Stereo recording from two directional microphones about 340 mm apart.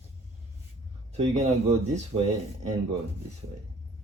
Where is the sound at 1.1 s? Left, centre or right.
Centre.